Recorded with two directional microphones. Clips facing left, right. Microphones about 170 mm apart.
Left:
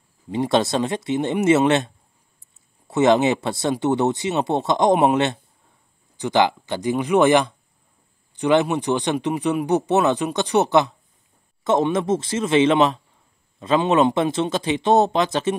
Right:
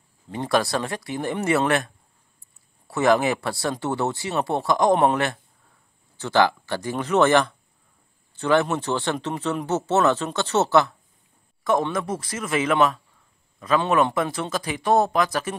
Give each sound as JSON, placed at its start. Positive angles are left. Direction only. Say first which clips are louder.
{"t": 0.3, "sound": "speech", "louder": "left 3 dB", "side_deg": 20}
{"t": 2.9, "sound": "speech", "louder": "left 3 dB", "side_deg": 20}